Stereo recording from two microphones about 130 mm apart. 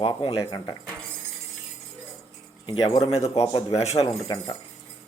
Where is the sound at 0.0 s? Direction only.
40° left (ahead or behind).